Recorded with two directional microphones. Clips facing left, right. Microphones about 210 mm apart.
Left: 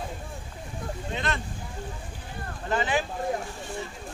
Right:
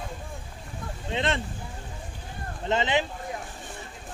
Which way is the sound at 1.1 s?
25° right (ahead or behind).